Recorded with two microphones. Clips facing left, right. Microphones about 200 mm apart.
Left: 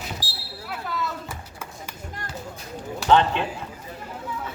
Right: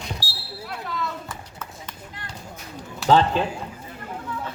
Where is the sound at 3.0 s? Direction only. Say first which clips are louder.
Right 1 dB; 35° right (ahead or behind).